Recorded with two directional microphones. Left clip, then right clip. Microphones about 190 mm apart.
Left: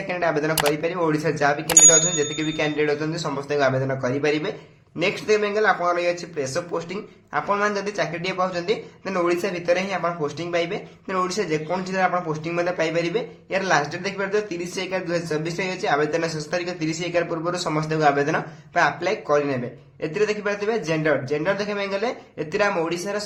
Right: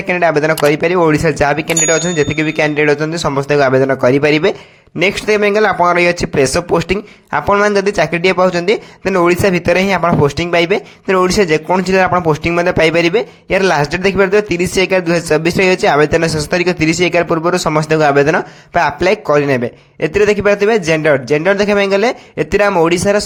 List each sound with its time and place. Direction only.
0.1 s a man's voice: 45° right (ahead or behind)